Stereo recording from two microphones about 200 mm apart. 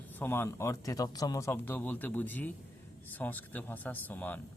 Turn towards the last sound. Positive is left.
turn(degrees=10)  # may be behind; listen again after turning